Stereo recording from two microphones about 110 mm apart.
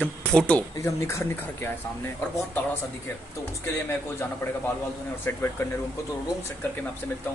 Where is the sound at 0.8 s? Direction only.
25° left (ahead or behind).